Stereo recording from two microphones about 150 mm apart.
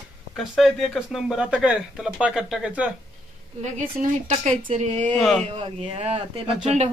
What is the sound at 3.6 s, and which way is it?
Speech, 50° right (ahead or behind).